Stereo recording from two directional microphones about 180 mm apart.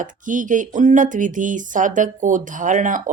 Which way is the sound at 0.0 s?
45° right (ahead or behind).